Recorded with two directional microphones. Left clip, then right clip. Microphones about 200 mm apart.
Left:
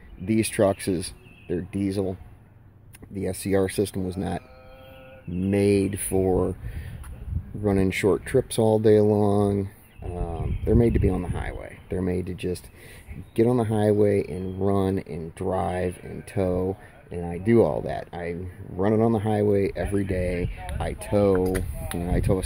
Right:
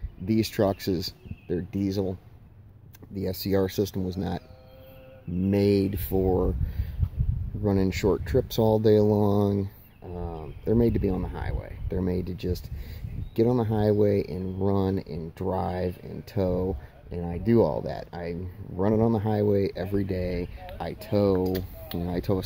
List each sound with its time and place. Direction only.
0.2 s speech: centre (ahead or behind)
3.2 s speech: centre (ahead or behind)
7.6 s speech: 5° left (ahead or behind)
21.5 s speech: 10° right (ahead or behind)
22.0 s speech: 5° left (ahead or behind)